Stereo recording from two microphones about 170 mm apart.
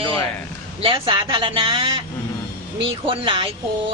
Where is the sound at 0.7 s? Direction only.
30° right (ahead or behind).